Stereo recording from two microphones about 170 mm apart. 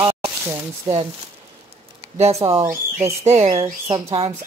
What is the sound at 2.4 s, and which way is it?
Speech, 15° right (ahead or behind).